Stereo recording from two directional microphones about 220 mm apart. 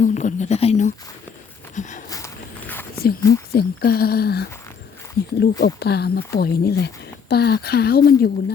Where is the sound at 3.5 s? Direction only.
45° left (ahead or behind).